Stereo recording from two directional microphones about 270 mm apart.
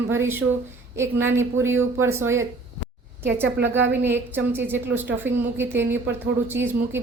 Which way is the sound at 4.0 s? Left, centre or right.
Centre.